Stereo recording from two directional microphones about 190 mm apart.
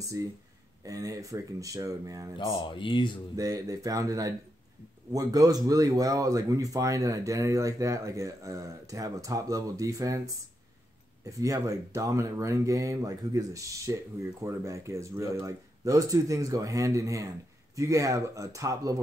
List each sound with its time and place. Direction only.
0.0 s speech: 15° right (ahead or behind)
2.3 s speech: 25° left (ahead or behind)
3.3 s speech: 15° right (ahead or behind)